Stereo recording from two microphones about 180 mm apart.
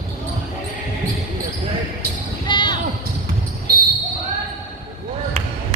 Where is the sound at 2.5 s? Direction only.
25° left (ahead or behind).